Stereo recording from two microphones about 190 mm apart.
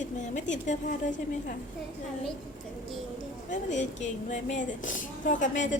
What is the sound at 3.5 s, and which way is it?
A woman's voice, 40° left (ahead or behind).